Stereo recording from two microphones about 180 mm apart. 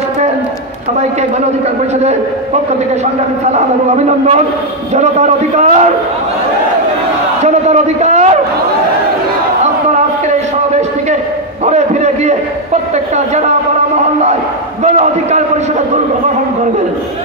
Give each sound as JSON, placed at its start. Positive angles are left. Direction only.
{"t": 3.5, "sound": "a man's voice", "side_deg": -40}
{"t": 7.4, "sound": "a man's voice", "side_deg": -40}
{"t": 11.6, "sound": "a sound", "side_deg": -40}
{"t": 14.8, "sound": "a man's voice", "side_deg": -40}